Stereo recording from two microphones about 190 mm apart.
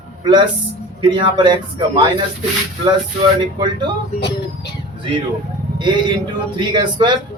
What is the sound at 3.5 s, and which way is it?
Speech, 25° right (ahead or behind).